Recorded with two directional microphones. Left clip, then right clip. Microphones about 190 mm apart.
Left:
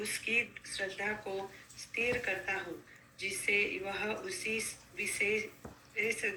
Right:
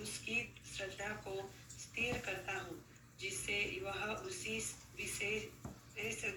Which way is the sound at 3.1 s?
35° left (ahead or behind).